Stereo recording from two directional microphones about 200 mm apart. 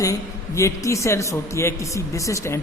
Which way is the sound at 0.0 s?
15° left (ahead or behind).